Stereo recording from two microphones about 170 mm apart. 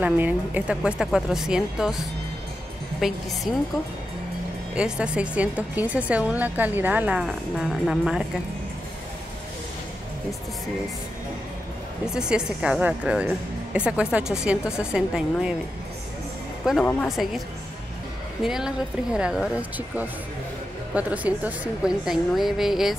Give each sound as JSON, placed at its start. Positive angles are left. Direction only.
{"t": 0.0, "sound": "a woman's voice", "side_deg": -10}
{"t": 4.7, "sound": "a woman's voice", "side_deg": -5}
{"t": 12.1, "sound": "a woman's voice", "side_deg": -5}
{"t": 16.6, "sound": "a woman's voice", "side_deg": 0}
{"t": 18.4, "sound": "a woman's voice", "side_deg": -5}